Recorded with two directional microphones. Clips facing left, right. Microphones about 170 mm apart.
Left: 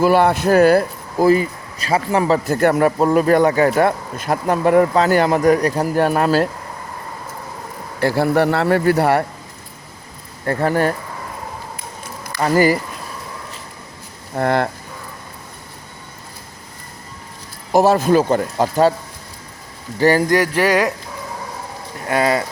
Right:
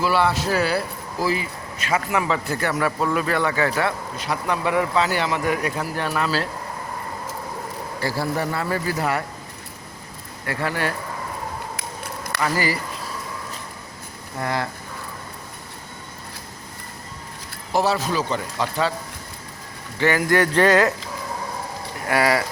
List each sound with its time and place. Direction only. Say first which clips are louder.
0.0 s speech: left 7 dB; 50° left (ahead or behind)
7.9 s speech: left 9 dB; 60° left (ahead or behind)
10.4 s speech: left 8 dB; 45° left (ahead or behind)
12.4 s speech: left 9 dB; 50° left (ahead or behind)
14.3 s speech: left 8 dB; 60° left (ahead or behind)
17.7 s speech: left 8 dB; 45° left (ahead or behind)
20.0 s speech: left 6 dB; 35° left (ahead or behind)
20.2 s speech: left 1 dB; 15° left (ahead or behind)
22.0 s speech: left 3 dB; 25° left (ahead or behind)